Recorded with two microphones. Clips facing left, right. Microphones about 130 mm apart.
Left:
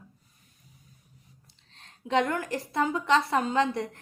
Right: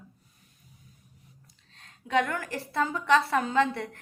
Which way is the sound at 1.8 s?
25° left (ahead or behind).